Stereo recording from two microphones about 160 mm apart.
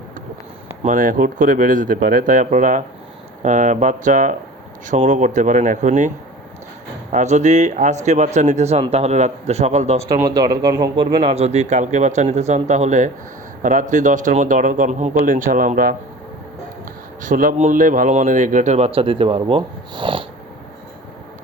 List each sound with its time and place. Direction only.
0.9 s a man's voice: 60° right (ahead or behind)
7.1 s a man's voice: 50° right (ahead or behind)
10.2 s a man's voice: 25° right (ahead or behind); by 16.0 s 65° right (ahead or behind)
17.2 s a man's voice: 55° right (ahead or behind); by 20.2 s 30° right (ahead or behind)